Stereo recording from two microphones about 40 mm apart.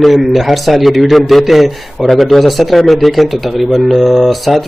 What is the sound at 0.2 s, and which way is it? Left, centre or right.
Speech, centre.